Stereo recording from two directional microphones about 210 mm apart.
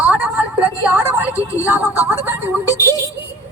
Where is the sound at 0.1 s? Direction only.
5° right (ahead or behind).